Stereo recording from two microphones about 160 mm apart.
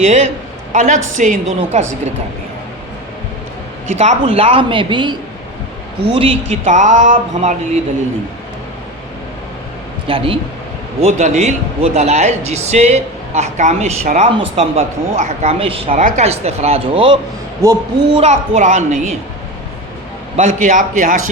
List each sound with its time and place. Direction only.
0.0 s a man's voice: 45° right (ahead or behind)
3.9 s speech: 40° right (ahead or behind)
6.1 s speech: 35° right (ahead or behind)
6.7 s a man's voice: 50° right (ahead or behind)
10.1 s speech: 35° right (ahead or behind)
11.0 s a man's voice: 45° right (ahead or behind)
17.6 s speech: 20° right (ahead or behind)
18.1 s a man's voice: 40° right (ahead or behind)
20.3 s a man's voice: 50° right (ahead or behind)